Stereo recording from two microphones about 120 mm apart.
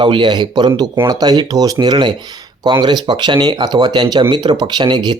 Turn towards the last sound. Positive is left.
turn(degrees=-40)  # may be behind; listen again after turning